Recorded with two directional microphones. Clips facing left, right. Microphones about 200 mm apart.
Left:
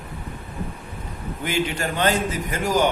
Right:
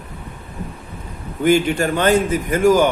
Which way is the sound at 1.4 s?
50° right (ahead or behind).